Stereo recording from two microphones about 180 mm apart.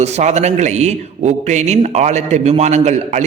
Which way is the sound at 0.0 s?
40° right (ahead or behind).